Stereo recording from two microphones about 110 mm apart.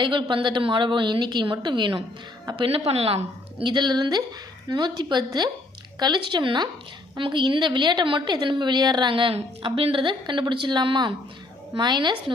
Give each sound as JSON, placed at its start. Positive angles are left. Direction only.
{"t": 0.0, "sound": "a woman's voice", "side_deg": -45}
{"t": 2.6, "sound": "a woman's voice", "side_deg": -65}
{"t": 3.6, "sound": "a woman's voice", "side_deg": -45}